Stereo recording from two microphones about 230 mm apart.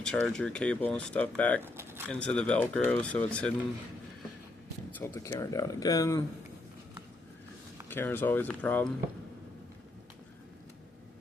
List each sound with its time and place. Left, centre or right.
0.0 s speech: centre
1.6 s pigeon: centre
2.0 s speech: centre
4.9 s speech: centre
7.9 s speech: centre